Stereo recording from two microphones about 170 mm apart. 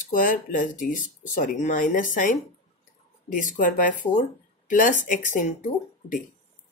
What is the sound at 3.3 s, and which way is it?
A woman's voice, 50° left (ahead or behind).